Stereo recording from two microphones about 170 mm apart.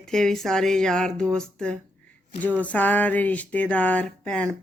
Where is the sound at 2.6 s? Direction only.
10° left (ahead or behind).